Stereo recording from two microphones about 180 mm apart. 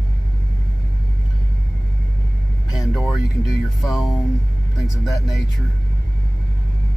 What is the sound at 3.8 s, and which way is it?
Speech, centre (ahead or behind).